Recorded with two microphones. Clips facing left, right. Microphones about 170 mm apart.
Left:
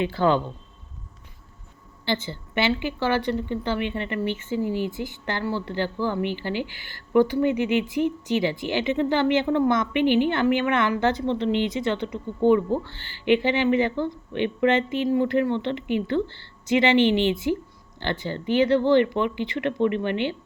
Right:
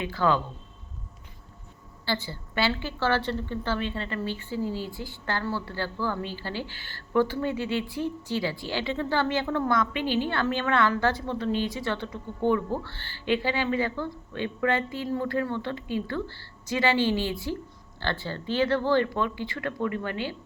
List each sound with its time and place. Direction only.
0.0 s a woman's voice: 25° left (ahead or behind)
2.0 s a woman's voice: 20° left (ahead or behind)